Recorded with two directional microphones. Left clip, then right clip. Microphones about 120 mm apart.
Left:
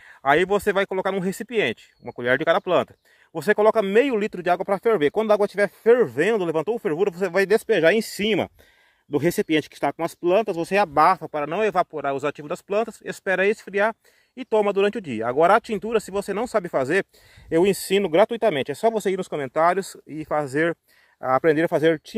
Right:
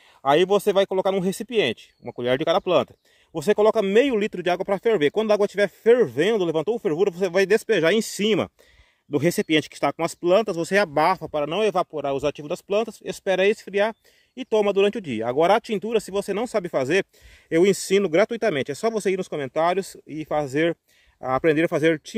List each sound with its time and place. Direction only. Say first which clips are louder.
0.2 s speech: right 1 dB; 25° right (ahead or behind)